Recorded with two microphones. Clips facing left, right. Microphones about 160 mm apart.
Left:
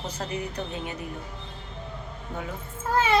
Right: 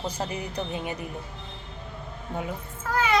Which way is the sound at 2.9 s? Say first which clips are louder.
Left 1 dB; 25° left (ahead or behind).